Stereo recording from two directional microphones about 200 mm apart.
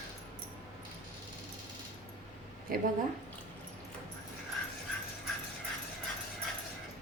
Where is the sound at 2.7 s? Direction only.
45° right (ahead or behind).